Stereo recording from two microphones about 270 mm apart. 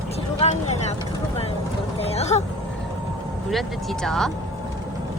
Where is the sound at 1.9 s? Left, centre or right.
Left.